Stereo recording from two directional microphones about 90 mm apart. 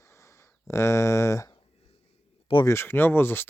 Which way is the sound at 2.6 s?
25° left (ahead or behind).